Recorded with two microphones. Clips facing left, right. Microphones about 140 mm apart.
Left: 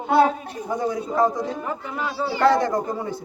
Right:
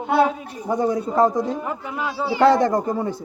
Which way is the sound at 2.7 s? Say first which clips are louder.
Right 3 dB; 35° right (ahead or behind).